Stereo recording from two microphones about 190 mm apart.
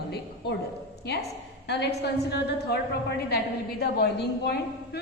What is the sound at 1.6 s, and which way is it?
A woman's voice, 60° left (ahead or behind).